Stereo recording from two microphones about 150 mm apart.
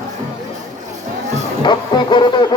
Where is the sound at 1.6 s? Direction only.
30° left (ahead or behind).